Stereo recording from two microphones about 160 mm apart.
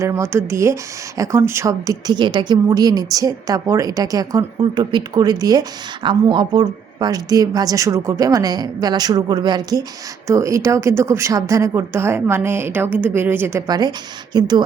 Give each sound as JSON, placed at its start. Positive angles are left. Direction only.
{"t": 0.0, "sound": "speech", "side_deg": -15}